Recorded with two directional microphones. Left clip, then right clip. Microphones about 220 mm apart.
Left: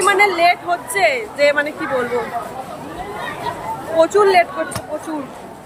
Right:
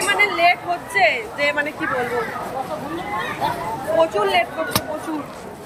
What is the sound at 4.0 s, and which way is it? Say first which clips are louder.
Speech: left 6 dB; 15° left (ahead or behind).